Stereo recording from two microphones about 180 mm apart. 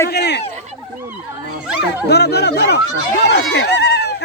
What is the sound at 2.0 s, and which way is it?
Speech, 65° left (ahead or behind).